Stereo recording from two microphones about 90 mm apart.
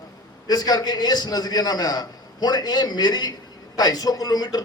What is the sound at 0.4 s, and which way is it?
A man's voice, 45° left (ahead or behind).